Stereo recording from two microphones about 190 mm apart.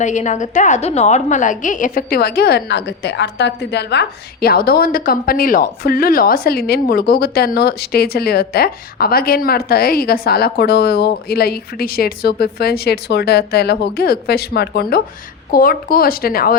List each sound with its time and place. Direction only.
0.0 s a woman's voice: 40° left (ahead or behind)